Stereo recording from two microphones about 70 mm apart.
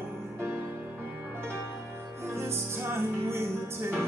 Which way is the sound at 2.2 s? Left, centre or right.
Right.